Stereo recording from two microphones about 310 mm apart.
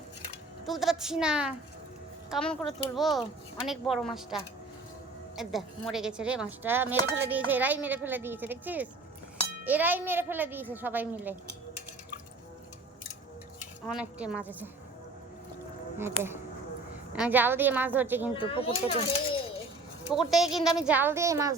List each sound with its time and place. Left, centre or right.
0.6 s speech: centre
5.4 s speech: centre
13.6 s speech: centre
16.0 s speech: centre
18.3 s speech: centre
20.1 s speech: centre